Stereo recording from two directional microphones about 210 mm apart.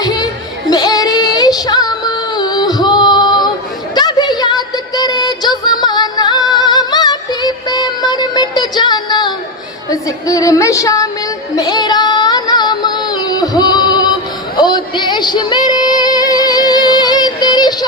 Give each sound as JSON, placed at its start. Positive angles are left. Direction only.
{"t": 0.0, "sound": "music", "side_deg": 20}
{"t": 0.7, "sound": "female singing", "side_deg": 20}
{"t": 3.9, "sound": "music", "side_deg": 20}
{"t": 11.5, "sound": "female singing", "side_deg": 20}